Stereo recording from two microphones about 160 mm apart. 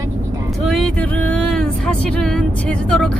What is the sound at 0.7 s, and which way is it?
Speech, 5° left (ahead or behind).